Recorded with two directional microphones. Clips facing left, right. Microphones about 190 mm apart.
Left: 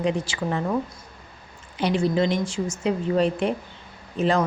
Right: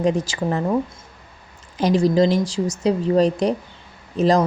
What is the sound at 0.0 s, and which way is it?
Speech, 40° right (ahead or behind).